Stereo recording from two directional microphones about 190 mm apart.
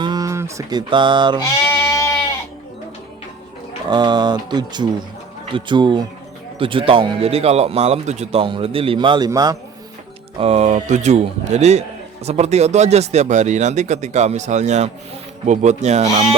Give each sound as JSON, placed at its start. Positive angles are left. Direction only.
{"t": 0.0, "sound": "mantra", "side_deg": -20}
{"t": 1.6, "sound": "goat", "side_deg": 15}
{"t": 3.8, "sound": "speech", "side_deg": -25}
{"t": 10.3, "sound": "a man's voice", "side_deg": -30}